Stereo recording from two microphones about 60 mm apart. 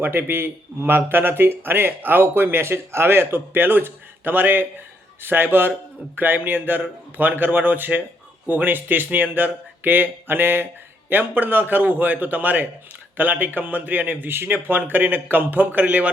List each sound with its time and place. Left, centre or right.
0.0 s a man's voice: right